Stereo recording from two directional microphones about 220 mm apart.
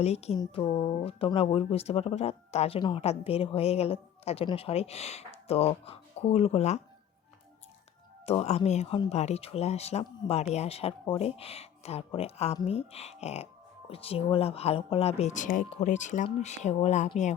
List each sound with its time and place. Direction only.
0.0 s speech: 30° left (ahead or behind)
8.3 s speech: 30° left (ahead or behind)